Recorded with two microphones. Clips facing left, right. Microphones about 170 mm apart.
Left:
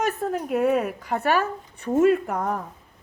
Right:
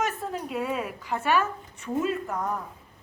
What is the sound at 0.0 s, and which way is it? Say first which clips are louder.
A woman's voice: left 5 dB; 50° left (ahead or behind).